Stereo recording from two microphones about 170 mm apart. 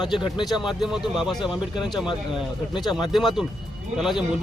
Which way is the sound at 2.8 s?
Centre (ahead or behind).